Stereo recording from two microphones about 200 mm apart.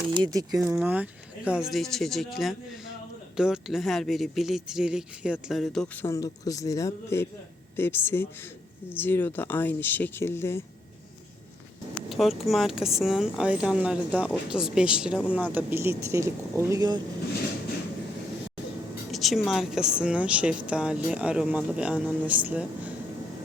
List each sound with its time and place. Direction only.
0.2 s speech: 20° right (ahead or behind); by 10.6 s 10° left (ahead or behind)
12.0 s speech: centre (ahead or behind); by 17.0 s 20° right (ahead or behind)
19.1 s speech: centre (ahead or behind)